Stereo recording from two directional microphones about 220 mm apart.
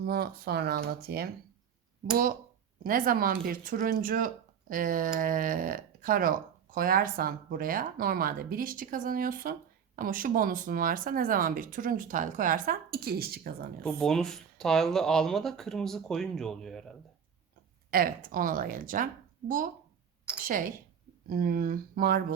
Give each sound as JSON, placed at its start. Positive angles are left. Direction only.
{"t": 0.0, "sound": "speech", "side_deg": -45}
{"t": 13.8, "sound": "speech", "side_deg": 5}
{"t": 17.9, "sound": "speech", "side_deg": -40}
{"t": 20.3, "sound": "speech", "side_deg": -5}
{"t": 21.2, "sound": "speech", "side_deg": -45}